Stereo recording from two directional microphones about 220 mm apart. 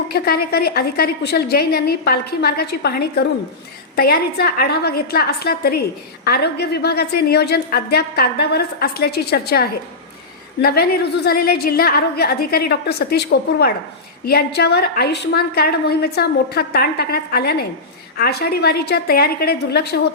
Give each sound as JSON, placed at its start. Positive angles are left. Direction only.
{"t": 0.1, "sound": "a woman's voice", "side_deg": 45}